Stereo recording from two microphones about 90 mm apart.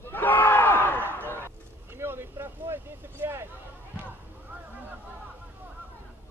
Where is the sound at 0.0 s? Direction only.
20° left (ahead or behind).